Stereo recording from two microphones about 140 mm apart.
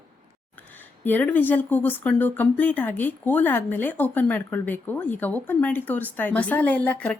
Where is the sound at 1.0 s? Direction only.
15° left (ahead or behind).